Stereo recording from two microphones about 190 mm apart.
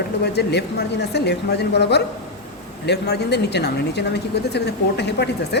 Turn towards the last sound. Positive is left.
turn(degrees=65)  # may be behind; listen again after turning